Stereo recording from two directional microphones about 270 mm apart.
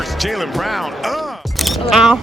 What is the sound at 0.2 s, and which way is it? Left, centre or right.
Speech, centre.